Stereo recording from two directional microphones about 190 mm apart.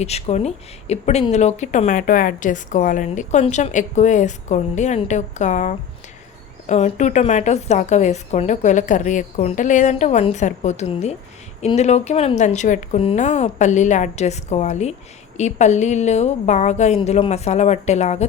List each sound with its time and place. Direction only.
0.0 s speech: 35° left (ahead or behind)